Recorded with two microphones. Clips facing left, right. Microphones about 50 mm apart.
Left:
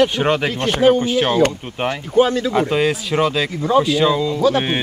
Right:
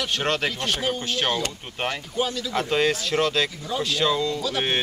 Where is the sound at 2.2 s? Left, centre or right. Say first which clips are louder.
Left 12 dB; left.